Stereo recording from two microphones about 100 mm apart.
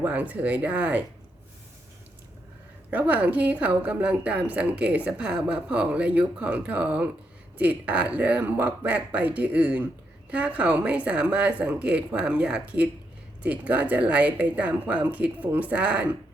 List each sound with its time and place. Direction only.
0.0 s a woman's voice: 15° right (ahead or behind)
2.9 s a woman's voice: 15° right (ahead or behind)